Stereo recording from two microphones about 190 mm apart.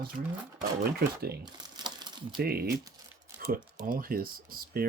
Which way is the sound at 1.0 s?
55° right (ahead or behind).